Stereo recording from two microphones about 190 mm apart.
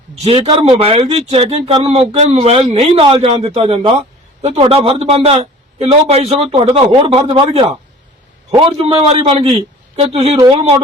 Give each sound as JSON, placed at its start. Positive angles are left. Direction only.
{"t": 0.2, "sound": "a man's voice", "side_deg": -30}